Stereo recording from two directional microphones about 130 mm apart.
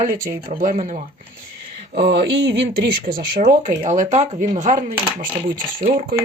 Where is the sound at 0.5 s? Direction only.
90° right; by 1.0 s 70° right (ahead or behind).